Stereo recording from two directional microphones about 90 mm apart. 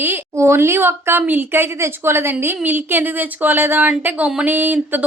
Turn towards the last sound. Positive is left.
turn(degrees=-20)  # may be behind; listen again after turning